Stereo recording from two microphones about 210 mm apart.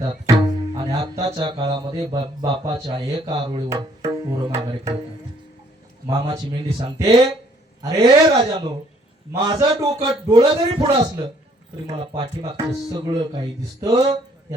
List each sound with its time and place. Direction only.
0.0 s music: 20° right (ahead or behind)
3.7 s music: 15° right (ahead or behind)
6.1 s music: 25° right (ahead or behind)
7.8 s speech: 15° right (ahead or behind)
9.3 s music: 20° right (ahead or behind)